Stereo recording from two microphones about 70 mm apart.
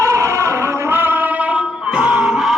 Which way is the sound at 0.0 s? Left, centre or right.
Right.